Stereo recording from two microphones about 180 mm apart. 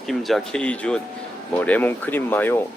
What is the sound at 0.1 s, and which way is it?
Speech, centre (ahead or behind).